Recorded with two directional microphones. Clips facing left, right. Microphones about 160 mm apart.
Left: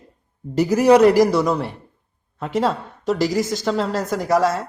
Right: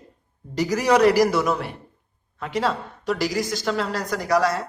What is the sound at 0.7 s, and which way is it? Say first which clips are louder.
Speech: left 8 dB; 5° left (ahead or behind).